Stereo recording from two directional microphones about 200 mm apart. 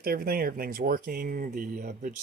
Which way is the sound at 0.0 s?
50° right (ahead or behind).